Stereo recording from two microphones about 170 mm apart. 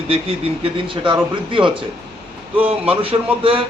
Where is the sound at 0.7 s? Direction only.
30° right (ahead or behind).